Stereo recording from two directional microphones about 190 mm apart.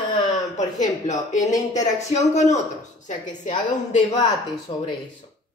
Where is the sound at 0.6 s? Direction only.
40° left (ahead or behind).